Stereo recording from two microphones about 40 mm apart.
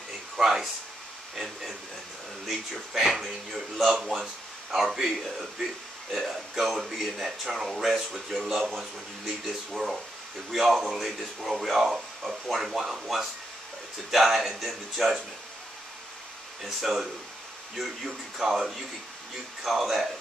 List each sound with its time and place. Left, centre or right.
0.4 s speech: centre
16.6 s speech: centre